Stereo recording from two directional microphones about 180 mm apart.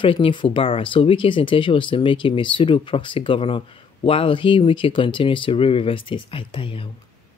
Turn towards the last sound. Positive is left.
turn(degrees=30)  # may be behind; listen again after turning